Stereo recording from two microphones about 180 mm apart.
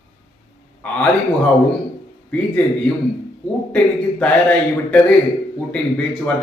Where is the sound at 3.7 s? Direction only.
5° left (ahead or behind).